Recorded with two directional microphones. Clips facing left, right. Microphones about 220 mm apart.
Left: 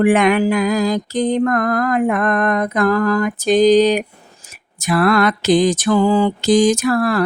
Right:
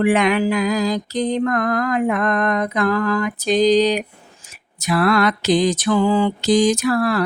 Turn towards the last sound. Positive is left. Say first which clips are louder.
# left 2 dB
turn(degrees=50)  # may be behind; listen again after turning